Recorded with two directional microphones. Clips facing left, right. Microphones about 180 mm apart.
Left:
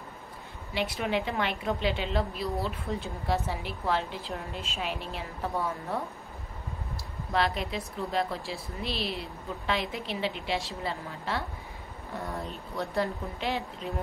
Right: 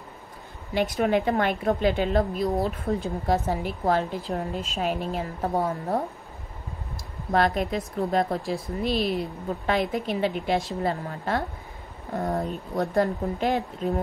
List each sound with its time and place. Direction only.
0.7 s a woman's voice: 45° right (ahead or behind)
7.3 s a woman's voice: 50° right (ahead or behind)